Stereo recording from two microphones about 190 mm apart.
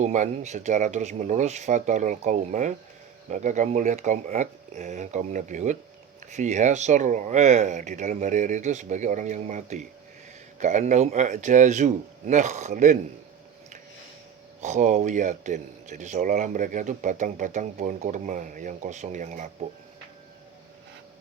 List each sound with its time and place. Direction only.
0.0 s a man's voice: 40° right (ahead or behind)
14.6 s a man's voice: 40° right (ahead or behind)